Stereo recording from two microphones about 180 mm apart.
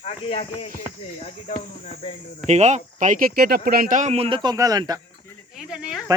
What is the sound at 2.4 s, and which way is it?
Speech, 40° right (ahead or behind).